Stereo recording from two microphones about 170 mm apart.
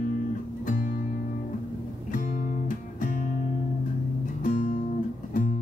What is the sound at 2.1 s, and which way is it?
Music, 50° left (ahead or behind).